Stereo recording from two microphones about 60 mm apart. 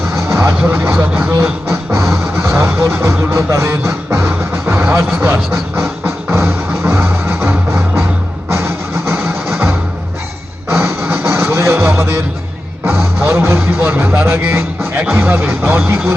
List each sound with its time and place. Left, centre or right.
0.3 s vehicle: right
0.9 s speech: right
1.6 s music: right
2.4 s vehicle: right
2.9 s speech: right
3.8 s music: right
4.6 s vehicle: right
6.3 s music: right
10.7 s music: right
13.8 s speech: right